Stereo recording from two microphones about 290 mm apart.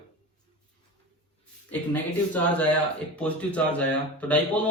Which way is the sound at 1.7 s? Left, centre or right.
Centre.